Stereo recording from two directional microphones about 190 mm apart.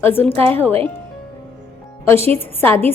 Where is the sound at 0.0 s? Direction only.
10° left (ahead or behind).